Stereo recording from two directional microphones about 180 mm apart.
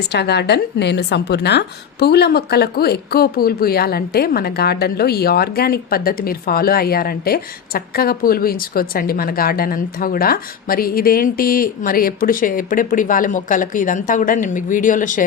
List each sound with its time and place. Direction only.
0.1 s a woman's voice: 65° left (ahead or behind); by 15.2 s 45° left (ahead or behind)